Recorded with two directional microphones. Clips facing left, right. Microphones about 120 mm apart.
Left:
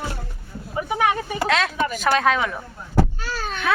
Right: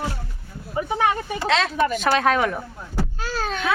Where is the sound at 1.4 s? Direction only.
30° right (ahead or behind).